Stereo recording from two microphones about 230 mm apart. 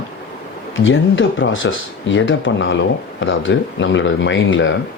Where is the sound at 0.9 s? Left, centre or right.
Left.